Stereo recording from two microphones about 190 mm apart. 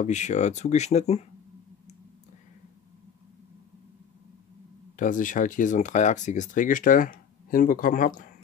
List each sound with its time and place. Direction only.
0.0 s speech: 40° left (ahead or behind)
4.9 s speech: 45° left (ahead or behind)